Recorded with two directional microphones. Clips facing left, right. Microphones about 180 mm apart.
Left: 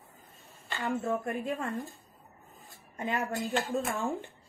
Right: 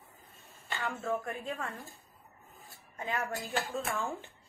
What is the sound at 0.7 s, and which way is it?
Speech, 15° left (ahead or behind).